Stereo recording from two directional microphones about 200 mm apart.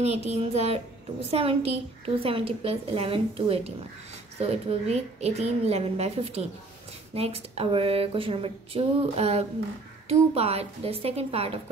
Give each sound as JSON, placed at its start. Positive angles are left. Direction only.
{"t": 0.0, "sound": "a woman's voice", "side_deg": -35}